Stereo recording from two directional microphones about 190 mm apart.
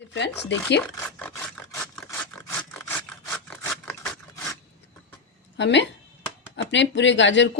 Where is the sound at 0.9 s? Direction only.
10° left (ahead or behind).